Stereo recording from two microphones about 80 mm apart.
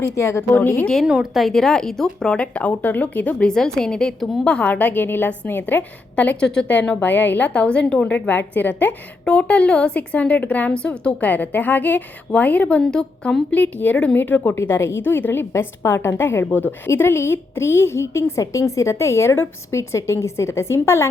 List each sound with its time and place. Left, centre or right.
0.2 s a woman's voice: left
1.0 s speech: centre
4.4 s a woman's voice: centre
14.6 s a woman's voice: left